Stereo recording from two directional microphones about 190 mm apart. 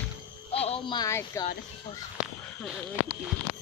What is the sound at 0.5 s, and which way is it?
Speech, 30° left (ahead or behind).